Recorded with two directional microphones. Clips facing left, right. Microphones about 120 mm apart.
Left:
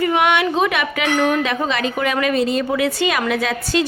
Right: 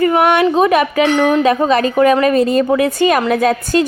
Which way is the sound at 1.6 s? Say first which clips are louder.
Right 9 dB; 45° right (ahead or behind).